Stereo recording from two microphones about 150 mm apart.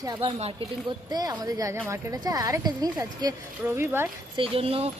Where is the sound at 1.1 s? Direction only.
25° right (ahead or behind).